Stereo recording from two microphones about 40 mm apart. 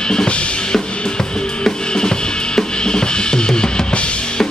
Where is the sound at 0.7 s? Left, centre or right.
Centre.